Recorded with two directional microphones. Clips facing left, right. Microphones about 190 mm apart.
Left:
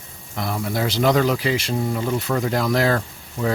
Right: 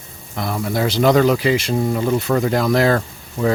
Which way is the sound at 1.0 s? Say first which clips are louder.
Right 5 dB; 60° right (ahead or behind).